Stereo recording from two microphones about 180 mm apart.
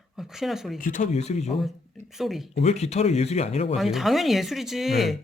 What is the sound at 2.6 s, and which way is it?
A man's voice, 35° left (ahead or behind).